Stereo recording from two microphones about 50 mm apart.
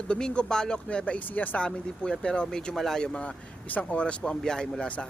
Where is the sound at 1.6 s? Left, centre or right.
Centre.